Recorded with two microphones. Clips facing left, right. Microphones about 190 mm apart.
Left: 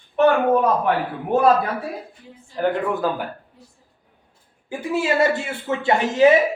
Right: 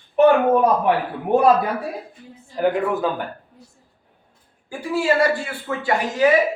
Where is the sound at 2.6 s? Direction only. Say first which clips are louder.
Right 1 dB; centre (ahead or behind).